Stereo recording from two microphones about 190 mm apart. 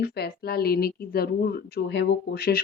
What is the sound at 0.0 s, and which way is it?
Speech, 55° left (ahead or behind).